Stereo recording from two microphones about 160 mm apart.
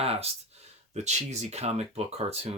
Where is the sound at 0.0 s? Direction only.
40° right (ahead or behind).